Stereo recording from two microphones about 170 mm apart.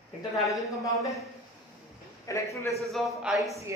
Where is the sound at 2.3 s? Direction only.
20° left (ahead or behind).